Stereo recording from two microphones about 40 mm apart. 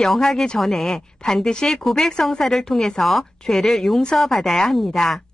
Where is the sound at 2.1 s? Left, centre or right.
Centre.